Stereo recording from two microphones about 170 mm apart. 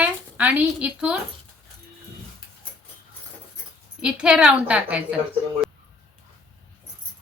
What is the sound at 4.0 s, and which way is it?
A woman's voice, 5° right (ahead or behind).